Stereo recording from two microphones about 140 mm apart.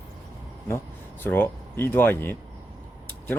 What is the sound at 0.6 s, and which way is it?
Speech, 15° left (ahead or behind).